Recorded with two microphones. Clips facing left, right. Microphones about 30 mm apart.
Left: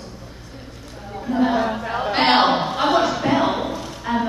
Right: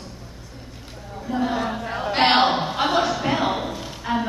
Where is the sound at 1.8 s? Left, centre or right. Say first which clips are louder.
Left 3 dB; centre.